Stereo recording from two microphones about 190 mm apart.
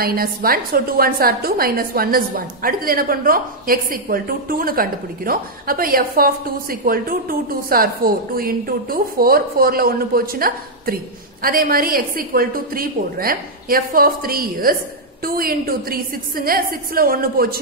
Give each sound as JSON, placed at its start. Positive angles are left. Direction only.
{"t": 0.0, "sound": "a woman's voice", "side_deg": -50}